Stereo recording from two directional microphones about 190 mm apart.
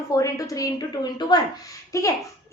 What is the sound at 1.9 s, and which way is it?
Speech, 15° left (ahead or behind).